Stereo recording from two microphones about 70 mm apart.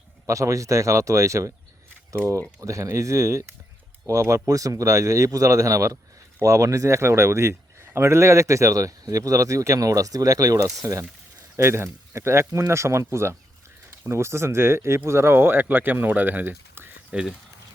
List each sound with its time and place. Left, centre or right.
0.3 s a man's voice: right
2.6 s a man's voice: right
11.5 s a man's voice: right
17.1 s speech: centre